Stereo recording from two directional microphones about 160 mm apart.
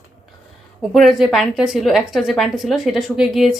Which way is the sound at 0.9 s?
Centre (ahead or behind).